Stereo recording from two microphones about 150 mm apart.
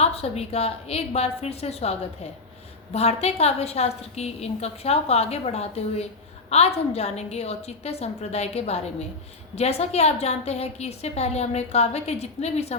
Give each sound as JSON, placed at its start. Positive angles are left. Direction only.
{"t": 0.0, "sound": "a woman's voice", "side_deg": 45}